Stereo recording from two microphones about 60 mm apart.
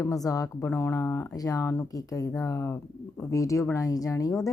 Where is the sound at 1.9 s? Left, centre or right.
Left.